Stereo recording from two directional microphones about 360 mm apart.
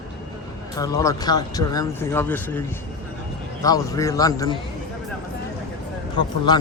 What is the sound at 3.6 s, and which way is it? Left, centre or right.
Speech, centre.